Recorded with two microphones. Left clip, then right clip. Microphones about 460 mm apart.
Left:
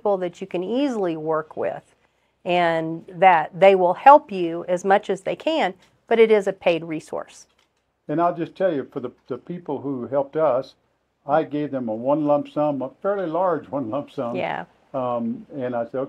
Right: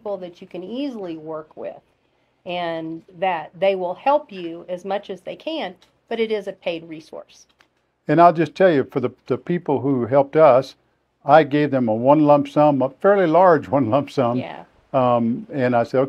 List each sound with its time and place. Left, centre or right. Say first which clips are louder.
0.0 s a woman's voice: left 6 dB; left
8.1 s speech: right 8 dB; right
14.3 s a woman's voice: left 2 dB; left
14.9 s speech: right 8 dB; right